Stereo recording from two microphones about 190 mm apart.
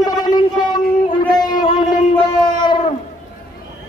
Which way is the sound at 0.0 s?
20° left (ahead or behind).